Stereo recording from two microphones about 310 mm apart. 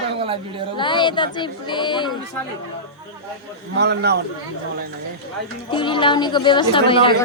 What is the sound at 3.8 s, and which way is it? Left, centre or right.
Speech, right.